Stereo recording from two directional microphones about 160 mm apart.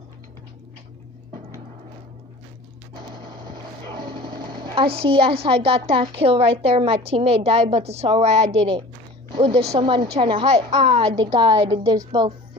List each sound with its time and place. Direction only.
3.8 s a sound: 30° right (ahead or behind)
4.7 s a woman's voice: 35° right (ahead or behind)
9.8 s a woman's voice: 30° right (ahead or behind)
10.5 s a woman's voice: 40° right (ahead or behind)